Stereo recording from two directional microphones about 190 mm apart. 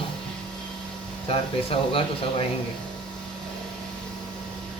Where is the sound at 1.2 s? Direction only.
30° left (ahead or behind).